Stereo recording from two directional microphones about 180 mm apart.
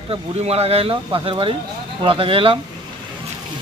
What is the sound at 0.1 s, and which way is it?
Speech, 35° right (ahead or behind).